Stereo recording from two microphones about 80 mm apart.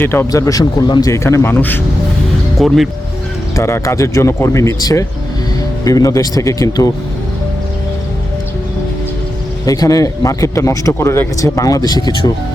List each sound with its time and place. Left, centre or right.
0.0 s speech: left
0.3 s speech: left
1.0 s speech: left
2.6 s speech: centre
3.5 s speech: left
9.6 s speech: left